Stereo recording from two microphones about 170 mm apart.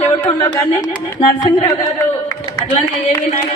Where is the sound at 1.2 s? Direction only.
40° left (ahead or behind).